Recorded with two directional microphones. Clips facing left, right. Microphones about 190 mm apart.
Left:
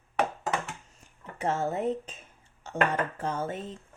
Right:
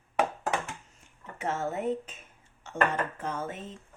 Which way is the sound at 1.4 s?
35° left (ahead or behind).